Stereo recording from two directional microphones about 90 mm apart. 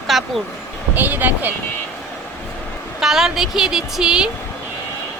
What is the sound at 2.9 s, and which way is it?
A woman's voice, 5° right (ahead or behind).